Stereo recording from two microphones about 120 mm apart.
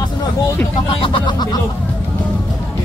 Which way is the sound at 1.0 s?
40° left (ahead or behind).